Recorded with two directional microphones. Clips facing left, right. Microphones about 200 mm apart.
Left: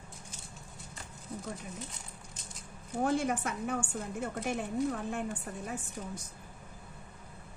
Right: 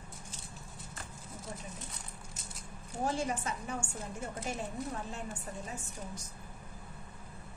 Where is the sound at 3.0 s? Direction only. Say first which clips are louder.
Left 4 dB; 60° left (ahead or behind).